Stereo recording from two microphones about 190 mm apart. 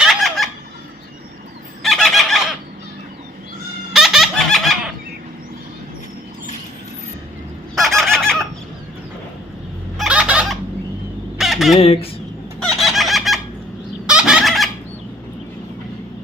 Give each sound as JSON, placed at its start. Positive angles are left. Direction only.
{"t": 0.0, "sound": "fowl", "side_deg": 0}
{"t": 1.8, "sound": "fowl", "side_deg": 0}
{"t": 3.9, "sound": "laughter", "side_deg": 0}
{"t": 7.8, "sound": "fowl", "side_deg": 0}
{"t": 10.0, "sound": "fowl", "side_deg": -5}
{"t": 11.8, "sound": "fowl", "side_deg": 30}
{"t": 12.6, "sound": "chicken", "side_deg": 0}
{"t": 14.1, "sound": "fowl", "side_deg": -5}